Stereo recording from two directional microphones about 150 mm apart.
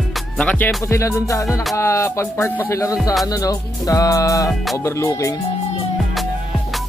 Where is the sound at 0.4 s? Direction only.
5° left (ahead or behind).